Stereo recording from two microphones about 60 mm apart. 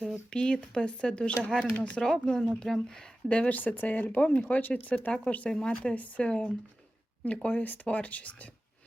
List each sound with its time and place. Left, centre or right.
0.3 s speech: centre
2.0 s speech: centre
2.2 s speech: centre
3.2 s speech: left
5.5 s speech: centre